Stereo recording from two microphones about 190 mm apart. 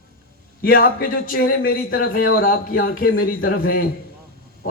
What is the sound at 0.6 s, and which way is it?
Speech, 55° left (ahead or behind).